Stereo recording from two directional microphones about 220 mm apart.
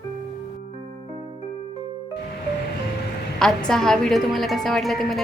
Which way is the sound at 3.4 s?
5° left (ahead or behind).